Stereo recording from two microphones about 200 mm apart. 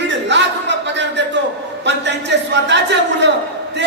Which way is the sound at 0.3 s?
60° right (ahead or behind).